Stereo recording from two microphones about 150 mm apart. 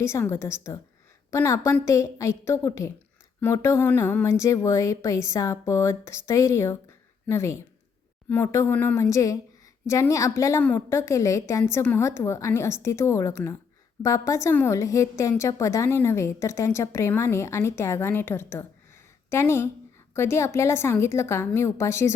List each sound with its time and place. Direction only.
0.0 s a woman's voice: 20° left (ahead or behind)